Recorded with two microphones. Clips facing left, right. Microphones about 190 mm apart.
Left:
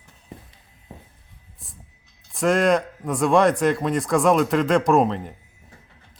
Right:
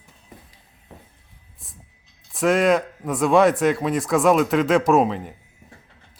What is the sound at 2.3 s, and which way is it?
A man's voice, centre (ahead or behind).